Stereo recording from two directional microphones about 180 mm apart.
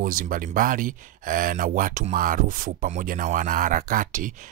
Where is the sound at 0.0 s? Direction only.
50° right (ahead or behind).